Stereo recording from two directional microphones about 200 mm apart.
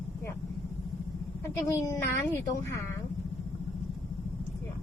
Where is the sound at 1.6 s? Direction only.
15° left (ahead or behind).